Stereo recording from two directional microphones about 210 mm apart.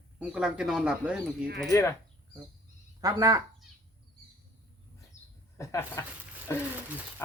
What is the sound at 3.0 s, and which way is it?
Speech, 15° right (ahead or behind).